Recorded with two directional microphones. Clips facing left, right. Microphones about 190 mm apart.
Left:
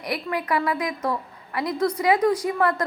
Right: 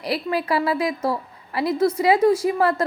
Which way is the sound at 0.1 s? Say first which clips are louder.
Right 3 dB; 30° right (ahead or behind).